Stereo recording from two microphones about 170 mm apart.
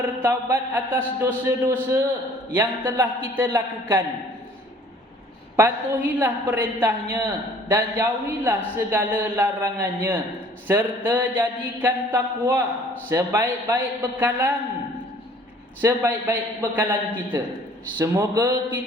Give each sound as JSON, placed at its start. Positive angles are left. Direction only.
{"t": 0.0, "sound": "speech", "side_deg": -10}
{"t": 5.5, "sound": "speech", "side_deg": -10}
{"t": 15.8, "sound": "speech", "side_deg": -10}